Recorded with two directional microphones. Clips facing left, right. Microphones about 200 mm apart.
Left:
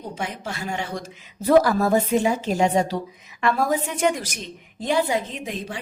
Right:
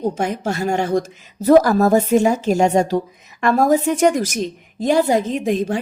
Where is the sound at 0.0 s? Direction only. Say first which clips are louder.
Right 10 dB; 45° right (ahead or behind).